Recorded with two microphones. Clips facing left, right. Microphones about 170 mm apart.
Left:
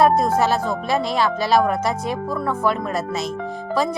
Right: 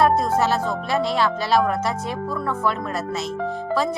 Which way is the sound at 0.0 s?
10° left (ahead or behind).